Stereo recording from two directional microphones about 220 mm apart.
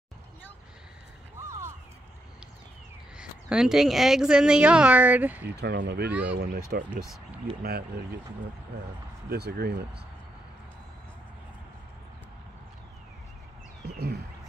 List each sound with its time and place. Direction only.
1.4 s a sound: 10° right (ahead or behind)
3.2 s a woman's voice: 5° right (ahead or behind)
5.6 s speech: 50° right (ahead or behind)
7.6 s speech: 45° right (ahead or behind)
9.3 s speech: 45° right (ahead or behind)
13.8 s a sound: 45° right (ahead or behind)